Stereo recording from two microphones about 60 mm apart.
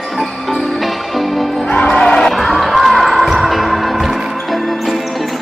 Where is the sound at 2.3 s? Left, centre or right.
Centre.